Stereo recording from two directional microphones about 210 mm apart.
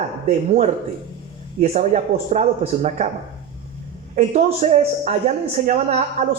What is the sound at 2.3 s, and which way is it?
Speech, 35° right (ahead or behind).